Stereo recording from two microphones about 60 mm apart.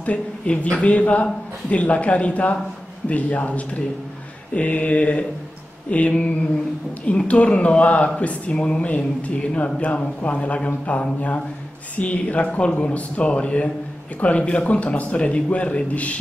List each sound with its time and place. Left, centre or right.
0.0 s speech: left